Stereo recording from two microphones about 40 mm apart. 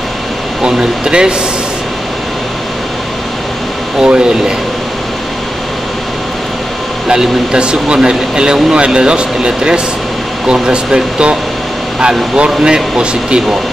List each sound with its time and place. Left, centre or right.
0.6 s speech: centre
4.0 s speech: right
7.1 s speech: right
12.4 s speech: centre